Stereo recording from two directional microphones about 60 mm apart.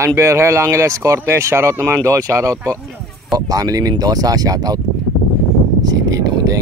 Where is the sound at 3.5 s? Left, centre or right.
Right.